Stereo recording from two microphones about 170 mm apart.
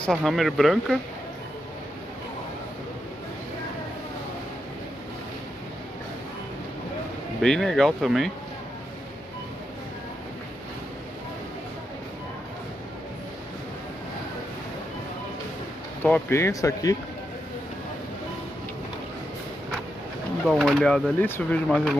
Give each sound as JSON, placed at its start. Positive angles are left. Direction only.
{"t": 0.0, "sound": "speech", "side_deg": 5}
{"t": 7.4, "sound": "speech", "side_deg": 5}
{"t": 16.0, "sound": "speech", "side_deg": 15}
{"t": 20.4, "sound": "speech", "side_deg": 0}